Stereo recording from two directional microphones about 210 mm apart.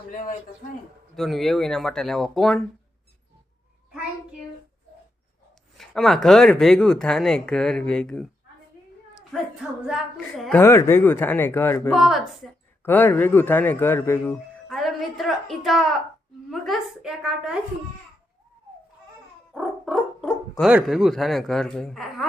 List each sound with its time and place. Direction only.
0.1 s a man's voice: 35° left (ahead or behind)
1.1 s speech: centre (ahead or behind)
5.7 s speech: centre (ahead or behind)
9.3 s speech: centre (ahead or behind)
10.6 s a man's voice: 10° left (ahead or behind)
11.9 s a man's voice: centre (ahead or behind)
14.7 s a woman's voice: centre (ahead or behind)
19.5 s dog: centre (ahead or behind)
20.7 s speech: 5° right (ahead or behind)